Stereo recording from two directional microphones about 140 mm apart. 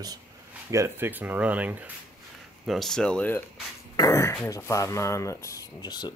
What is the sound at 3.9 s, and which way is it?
Speech, 25° left (ahead or behind).